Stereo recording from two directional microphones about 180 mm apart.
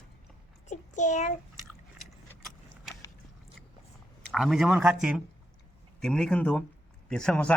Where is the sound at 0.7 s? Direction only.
45° left (ahead or behind).